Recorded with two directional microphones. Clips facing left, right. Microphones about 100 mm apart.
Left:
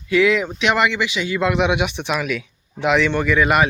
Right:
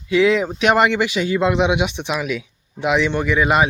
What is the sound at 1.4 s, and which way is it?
A man's voice, 25° right (ahead or behind).